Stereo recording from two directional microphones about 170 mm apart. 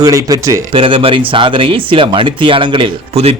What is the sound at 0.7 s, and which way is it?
Speech, 30° right (ahead or behind).